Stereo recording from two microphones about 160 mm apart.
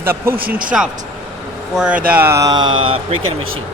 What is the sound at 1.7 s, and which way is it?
Speech, 5° right (ahead or behind).